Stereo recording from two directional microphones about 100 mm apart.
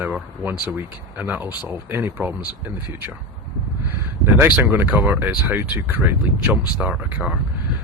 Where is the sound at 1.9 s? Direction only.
15° right (ahead or behind).